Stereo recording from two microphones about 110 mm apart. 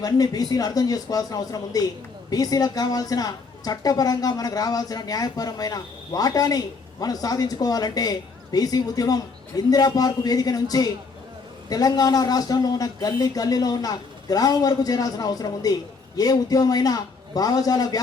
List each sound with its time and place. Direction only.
0.0 s a woman's voice: 35° left (ahead or behind)